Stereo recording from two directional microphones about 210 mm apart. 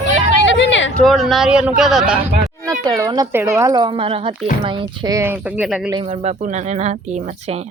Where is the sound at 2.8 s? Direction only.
15° right (ahead or behind).